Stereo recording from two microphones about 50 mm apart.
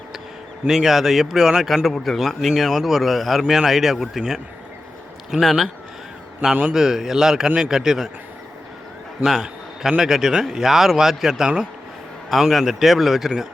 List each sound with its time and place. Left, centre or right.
0.7 s speech: centre
1.6 s a man's voice: centre
6.4 s a man's voice: centre
9.2 s a man's voice: centre